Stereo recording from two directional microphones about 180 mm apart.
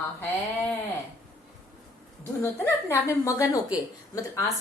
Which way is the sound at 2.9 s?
15° left (ahead or behind).